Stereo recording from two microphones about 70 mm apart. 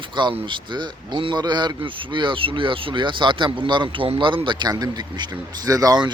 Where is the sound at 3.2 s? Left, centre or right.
Right.